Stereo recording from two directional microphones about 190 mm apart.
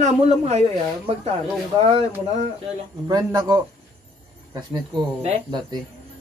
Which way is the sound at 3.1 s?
20° right (ahead or behind).